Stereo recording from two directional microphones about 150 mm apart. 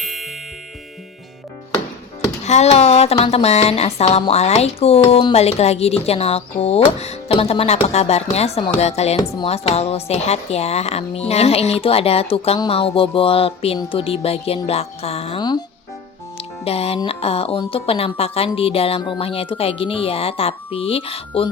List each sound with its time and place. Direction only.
0.0 s ding: centre (ahead or behind)
2.4 s a woman's voice: 50° left (ahead or behind)
15.4 s speech: 30° left (ahead or behind)
16.6 s a woman's voice: 40° left (ahead or behind)